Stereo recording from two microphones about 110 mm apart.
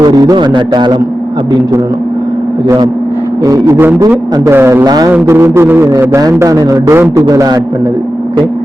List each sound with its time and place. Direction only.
0.0 s a man's voice: 35° right (ahead or behind)
3.4 s a man's voice: 30° right (ahead or behind)
4.9 s a man's voice: 35° right (ahead or behind)
5.2 s a man's voice: 25° right (ahead or behind)